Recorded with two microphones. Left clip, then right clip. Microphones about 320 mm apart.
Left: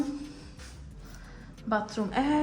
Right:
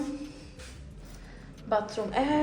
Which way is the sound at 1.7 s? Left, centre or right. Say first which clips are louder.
Right 2 dB; left.